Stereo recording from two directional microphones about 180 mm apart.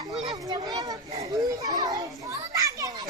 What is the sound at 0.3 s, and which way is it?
Children playing, 25° right (ahead or behind).